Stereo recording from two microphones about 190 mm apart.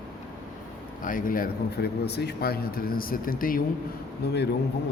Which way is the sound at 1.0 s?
45° left (ahead or behind).